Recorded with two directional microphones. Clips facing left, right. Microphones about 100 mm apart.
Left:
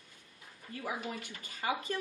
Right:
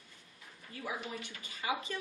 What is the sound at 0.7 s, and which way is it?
Speech, 45° left (ahead or behind).